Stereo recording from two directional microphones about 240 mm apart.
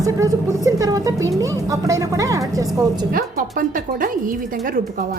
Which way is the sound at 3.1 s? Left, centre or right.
Right.